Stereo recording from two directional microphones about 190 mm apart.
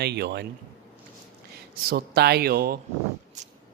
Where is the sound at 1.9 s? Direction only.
55° right (ahead or behind).